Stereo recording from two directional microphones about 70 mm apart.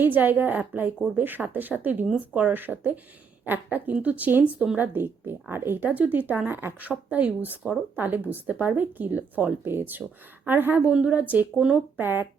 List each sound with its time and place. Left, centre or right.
0.0 s speech: right
2.5 s speech: right
11.9 s speech: right